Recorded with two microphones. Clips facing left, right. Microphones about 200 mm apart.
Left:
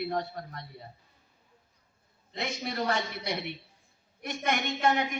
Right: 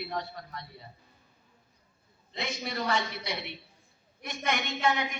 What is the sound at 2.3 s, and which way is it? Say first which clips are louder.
A man's voice: left 1 dB; 50° left (ahead or behind).